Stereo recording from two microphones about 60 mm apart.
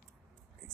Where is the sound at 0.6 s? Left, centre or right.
Centre.